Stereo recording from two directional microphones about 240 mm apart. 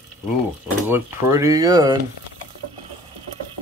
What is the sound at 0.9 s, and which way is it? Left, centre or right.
Speech, centre.